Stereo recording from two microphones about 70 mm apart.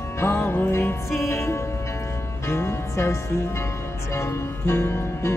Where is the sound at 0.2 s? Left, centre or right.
Left.